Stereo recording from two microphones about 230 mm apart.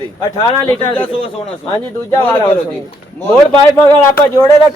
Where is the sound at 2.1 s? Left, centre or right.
Centre.